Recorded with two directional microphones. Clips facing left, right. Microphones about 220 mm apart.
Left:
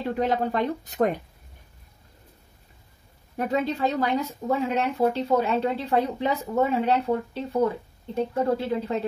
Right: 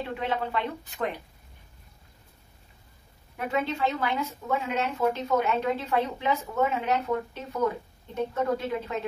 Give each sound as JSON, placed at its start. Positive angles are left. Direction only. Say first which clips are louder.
{"t": 0.2, "sound": "speech", "louder": "left 6 dB", "side_deg": 40}
{"t": 3.3, "sound": "speech", "louder": "left 3 dB", "side_deg": 35}